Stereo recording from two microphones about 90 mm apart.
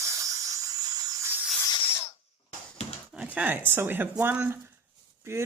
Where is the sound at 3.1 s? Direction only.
15° right (ahead or behind).